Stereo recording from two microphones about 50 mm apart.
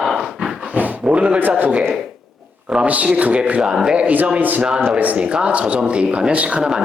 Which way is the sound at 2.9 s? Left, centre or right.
Right.